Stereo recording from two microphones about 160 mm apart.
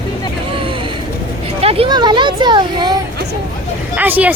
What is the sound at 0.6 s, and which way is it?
Vehicle, 30° right (ahead or behind).